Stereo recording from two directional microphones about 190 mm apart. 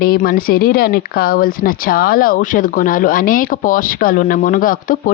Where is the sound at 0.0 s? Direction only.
50° left (ahead or behind).